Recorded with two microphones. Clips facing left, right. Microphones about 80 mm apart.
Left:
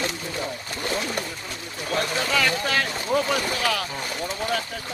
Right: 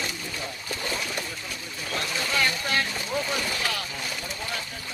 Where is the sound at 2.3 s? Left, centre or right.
Left.